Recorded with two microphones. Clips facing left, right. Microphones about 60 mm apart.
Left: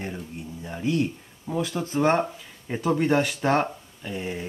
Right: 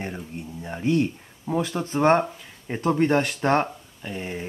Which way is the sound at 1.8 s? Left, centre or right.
Right.